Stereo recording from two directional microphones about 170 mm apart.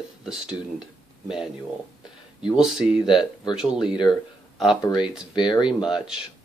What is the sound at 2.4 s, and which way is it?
Speech, 5° right (ahead or behind).